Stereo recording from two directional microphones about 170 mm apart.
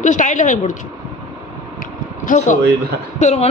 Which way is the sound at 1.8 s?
50° left (ahead or behind).